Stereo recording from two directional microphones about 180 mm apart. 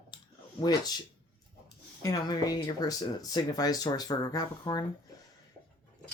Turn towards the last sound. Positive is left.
turn(degrees=20)  # may be behind; listen again after turning